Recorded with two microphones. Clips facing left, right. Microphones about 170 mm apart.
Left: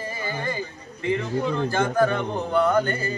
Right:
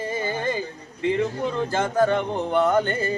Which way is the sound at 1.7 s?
25° right (ahead or behind).